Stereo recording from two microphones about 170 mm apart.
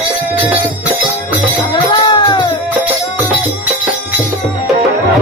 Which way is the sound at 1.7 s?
25° left (ahead or behind).